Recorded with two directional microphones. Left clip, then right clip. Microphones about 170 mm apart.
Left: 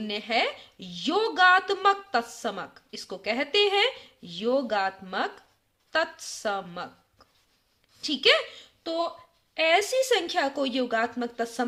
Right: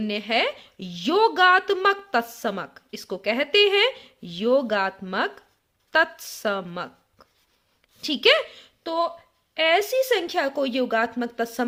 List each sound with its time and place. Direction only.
0.0 s a woman's voice: 40° right (ahead or behind)
9.6 s a woman's voice: 25° right (ahead or behind); by 11.6 s 40° right (ahead or behind)